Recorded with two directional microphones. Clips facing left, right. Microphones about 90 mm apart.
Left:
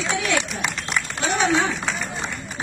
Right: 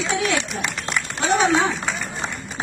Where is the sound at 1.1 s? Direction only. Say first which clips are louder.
Right 4 dB; 30° right (ahead or behind).